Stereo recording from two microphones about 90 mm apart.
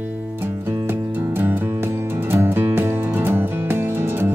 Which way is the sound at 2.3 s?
25° right (ahead or behind).